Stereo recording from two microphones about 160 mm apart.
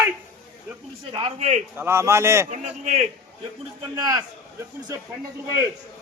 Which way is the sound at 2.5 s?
50° right (ahead or behind).